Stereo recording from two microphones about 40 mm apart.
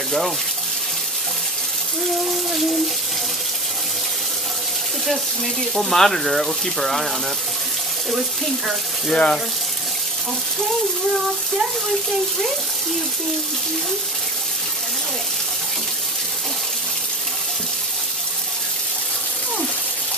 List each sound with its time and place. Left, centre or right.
5.8 s speech: centre
9.1 s speech: left